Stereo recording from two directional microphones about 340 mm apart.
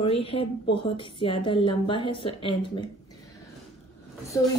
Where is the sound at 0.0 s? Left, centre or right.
Centre.